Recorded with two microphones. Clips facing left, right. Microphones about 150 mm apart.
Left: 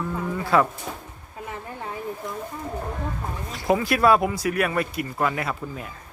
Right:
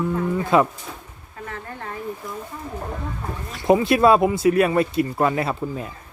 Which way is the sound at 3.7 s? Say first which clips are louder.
Right 4 dB; 25° right (ahead or behind).